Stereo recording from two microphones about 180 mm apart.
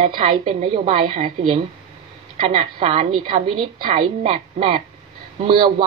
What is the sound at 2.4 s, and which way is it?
A woman's voice, 30° right (ahead or behind).